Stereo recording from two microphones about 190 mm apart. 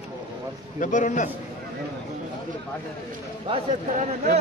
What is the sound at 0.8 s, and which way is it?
Speech, 40° left (ahead or behind).